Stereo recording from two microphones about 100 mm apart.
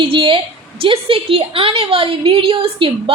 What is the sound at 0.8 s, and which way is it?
A woman's voice, 65° right (ahead or behind).